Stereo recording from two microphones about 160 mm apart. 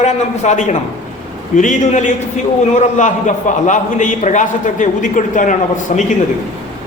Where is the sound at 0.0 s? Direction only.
45° left (ahead or behind).